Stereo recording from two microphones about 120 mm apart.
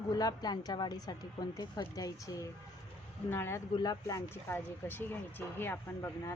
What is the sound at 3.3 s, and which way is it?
Speech, 20° left (ahead or behind).